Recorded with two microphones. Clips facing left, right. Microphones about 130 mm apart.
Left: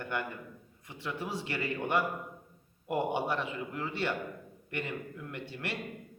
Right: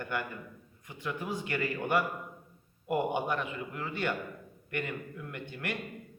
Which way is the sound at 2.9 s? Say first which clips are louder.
Right 1 dB; 30° left (ahead or behind).